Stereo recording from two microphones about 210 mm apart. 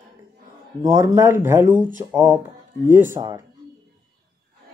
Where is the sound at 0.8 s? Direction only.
15° right (ahead or behind).